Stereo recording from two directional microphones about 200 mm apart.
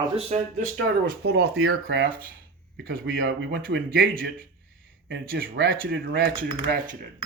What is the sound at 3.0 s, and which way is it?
Speech, 65° right (ahead or behind).